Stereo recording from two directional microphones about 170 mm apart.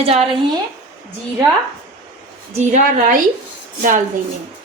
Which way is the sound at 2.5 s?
45° right (ahead or behind).